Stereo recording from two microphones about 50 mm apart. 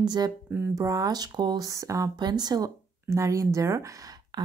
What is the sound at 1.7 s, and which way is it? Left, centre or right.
Speech, right.